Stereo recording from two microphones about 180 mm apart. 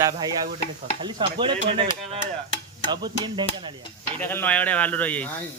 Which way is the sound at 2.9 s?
25° right (ahead or behind).